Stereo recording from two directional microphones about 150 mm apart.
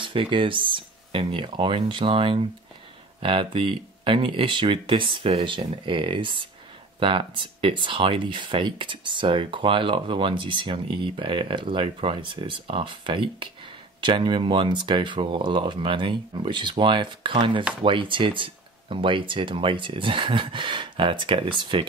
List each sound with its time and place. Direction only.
0.0 s speech: 35° right (ahead or behind)